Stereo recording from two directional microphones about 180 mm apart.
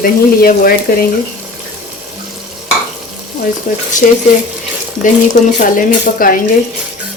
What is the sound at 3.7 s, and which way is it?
Speech, 45° left (ahead or behind).